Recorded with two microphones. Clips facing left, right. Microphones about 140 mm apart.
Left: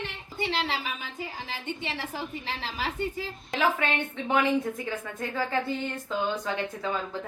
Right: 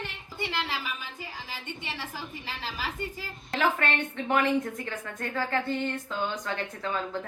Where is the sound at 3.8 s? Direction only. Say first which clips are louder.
Even; 5° left (ahead or behind).